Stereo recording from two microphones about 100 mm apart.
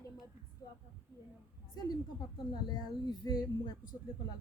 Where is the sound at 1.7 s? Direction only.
45° left (ahead or behind).